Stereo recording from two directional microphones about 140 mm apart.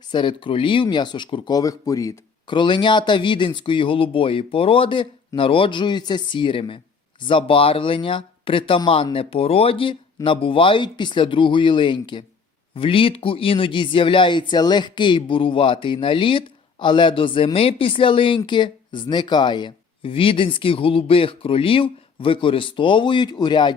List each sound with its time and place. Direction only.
0.1 s a woman's voice: 35° left (ahead or behind)